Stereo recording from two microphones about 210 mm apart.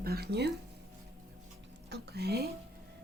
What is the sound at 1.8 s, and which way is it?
Speech, 50° right (ahead or behind).